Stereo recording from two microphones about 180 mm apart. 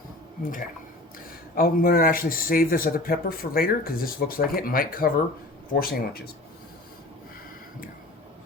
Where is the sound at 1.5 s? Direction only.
55° left (ahead or behind).